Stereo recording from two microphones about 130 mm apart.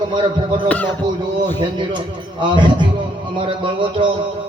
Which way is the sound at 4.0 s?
40° right (ahead or behind).